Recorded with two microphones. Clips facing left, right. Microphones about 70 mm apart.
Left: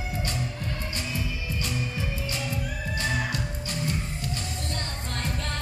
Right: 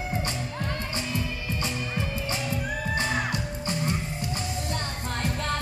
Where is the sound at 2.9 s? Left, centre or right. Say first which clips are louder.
Right 1 dB; right.